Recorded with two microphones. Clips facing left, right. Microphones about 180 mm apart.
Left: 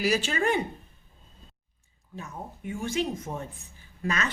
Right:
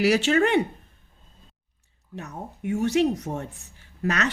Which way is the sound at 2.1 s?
75° right (ahead or behind).